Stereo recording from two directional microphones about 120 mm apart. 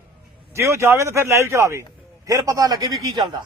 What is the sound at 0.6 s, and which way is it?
A man's voice, 25° right (ahead or behind).